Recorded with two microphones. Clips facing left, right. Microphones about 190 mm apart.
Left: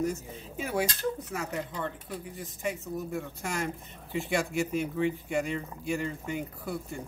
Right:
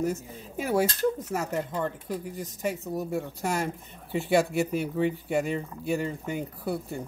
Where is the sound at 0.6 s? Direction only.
40° right (ahead or behind).